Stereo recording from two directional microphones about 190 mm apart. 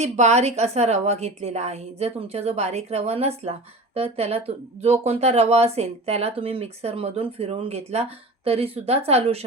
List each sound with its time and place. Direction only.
0.0 s a woman's voice: 35° right (ahead or behind)